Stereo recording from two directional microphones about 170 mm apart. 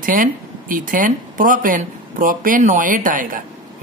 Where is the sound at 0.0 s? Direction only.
55° right (ahead or behind).